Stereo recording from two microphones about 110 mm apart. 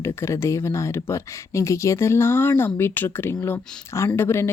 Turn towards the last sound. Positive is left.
turn(degrees=20)  # may be behind; listen again after turning